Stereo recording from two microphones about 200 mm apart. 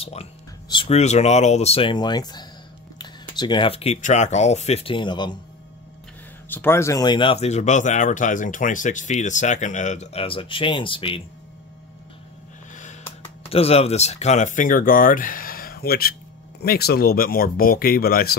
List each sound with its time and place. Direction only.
0.0 s speech: 30° left (ahead or behind)
6.5 s speech: 10° left (ahead or behind); by 11.2 s 25° left (ahead or behind)
13.5 s speech: 30° left (ahead or behind); by 18.3 s 50° left (ahead or behind)